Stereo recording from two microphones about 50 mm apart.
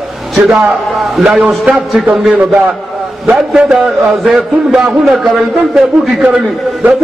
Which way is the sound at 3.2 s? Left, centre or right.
Centre.